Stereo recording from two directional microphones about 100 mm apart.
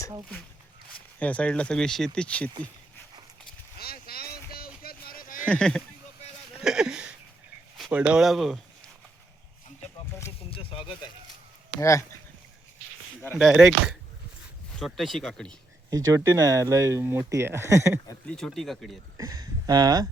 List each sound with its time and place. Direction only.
1.2 s speech: 15° left (ahead or behind)
5.5 s speech: 5° left (ahead or behind)
6.6 s a sound: 5° right (ahead or behind)
7.9 s speech: 15° right (ahead or behind)
10.5 s a sound: 65° left (ahead or behind)
11.8 s speech: 30° left (ahead or behind)
13.4 s speech: 5° right (ahead or behind)
15.9 s speech: 35° right (ahead or behind)
18.3 s speech: 5° left (ahead or behind)
19.1 s speech: 35° right (ahead or behind)